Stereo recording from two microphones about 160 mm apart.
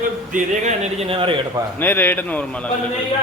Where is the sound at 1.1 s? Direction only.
35° right (ahead or behind).